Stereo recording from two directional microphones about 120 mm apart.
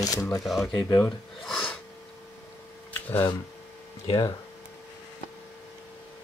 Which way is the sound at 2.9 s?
15° left (ahead or behind).